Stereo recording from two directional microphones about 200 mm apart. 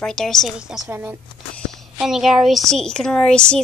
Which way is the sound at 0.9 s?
10° right (ahead or behind).